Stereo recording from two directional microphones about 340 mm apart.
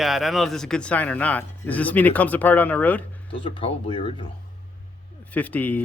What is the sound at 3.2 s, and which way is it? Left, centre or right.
Speech, centre.